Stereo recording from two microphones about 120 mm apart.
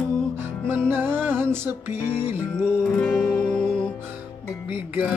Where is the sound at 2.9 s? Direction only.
15° left (ahead or behind).